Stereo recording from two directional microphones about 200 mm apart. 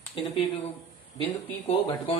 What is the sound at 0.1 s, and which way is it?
Speech, 30° left (ahead or behind).